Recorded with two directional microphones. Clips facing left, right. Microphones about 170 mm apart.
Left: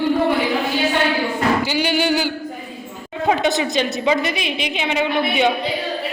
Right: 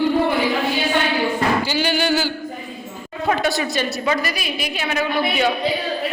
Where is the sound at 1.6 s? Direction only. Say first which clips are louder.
Left 1 dB; 20° left (ahead or behind).